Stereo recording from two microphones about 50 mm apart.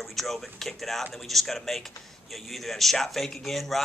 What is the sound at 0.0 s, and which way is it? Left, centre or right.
A man's voice, centre.